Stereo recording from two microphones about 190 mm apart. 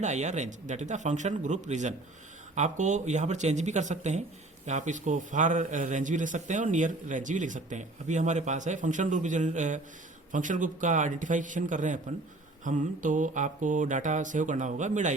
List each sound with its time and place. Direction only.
0.0 s a man's voice: 40° right (ahead or behind)